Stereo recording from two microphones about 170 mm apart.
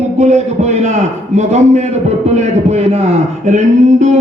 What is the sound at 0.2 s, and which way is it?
A man's voice, 40° right (ahead or behind).